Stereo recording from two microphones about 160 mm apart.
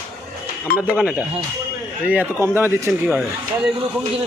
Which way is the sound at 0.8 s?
5° right (ahead or behind).